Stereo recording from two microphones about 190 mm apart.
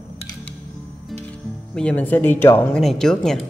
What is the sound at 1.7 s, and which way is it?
Speech, 5° left (ahead or behind).